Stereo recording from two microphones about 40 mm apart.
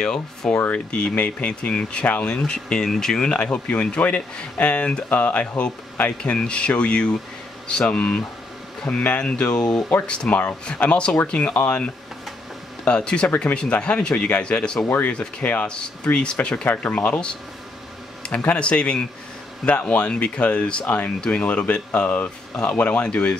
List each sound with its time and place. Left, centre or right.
0.0 s speech: centre
0.7 s speech: left; by 3.2 s centre
3.2 s speech: left
3.4 s speech: left
6.4 s speech: left
12.8 s speech: left
16.6 s speech: left
18.3 s speech: left
23.0 s speech: left